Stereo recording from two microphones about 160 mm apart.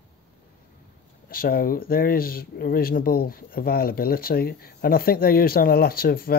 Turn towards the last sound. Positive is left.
turn(degrees=70)  # may be behind; listen again after turning